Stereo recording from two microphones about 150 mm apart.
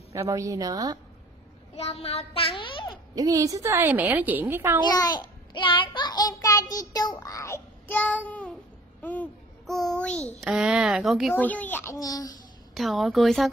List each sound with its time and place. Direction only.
0.1 s a woman's voice: 20° right (ahead or behind)
1.8 s a woman's voice: 45° left (ahead or behind)
3.2 s a woman's voice: 25° right (ahead or behind)
4.8 s child singing: 25° left (ahead or behind); by 8.5 s 10° left (ahead or behind)
9.0 s a child's voice: 10° left (ahead or behind)
10.4 s speech: 5° right (ahead or behind)
11.3 s a child's voice: 10° left (ahead or behind)
12.7 s speech: centre (ahead or behind)